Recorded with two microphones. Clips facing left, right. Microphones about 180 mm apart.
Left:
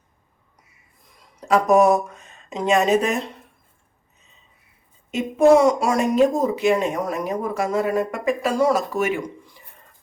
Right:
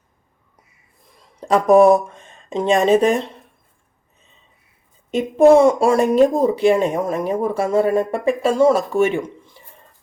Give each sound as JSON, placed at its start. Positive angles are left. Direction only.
{"t": 1.4, "sound": "speech", "side_deg": -30}
{"t": 5.1, "sound": "speech", "side_deg": -30}